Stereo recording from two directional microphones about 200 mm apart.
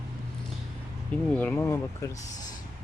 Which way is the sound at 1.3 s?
10° left (ahead or behind).